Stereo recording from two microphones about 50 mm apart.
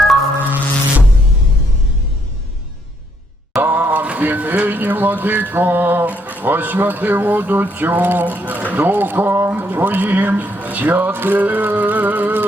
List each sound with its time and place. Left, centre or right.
0.4 s music: right
3.6 s a sound: right
4.0 s speech: right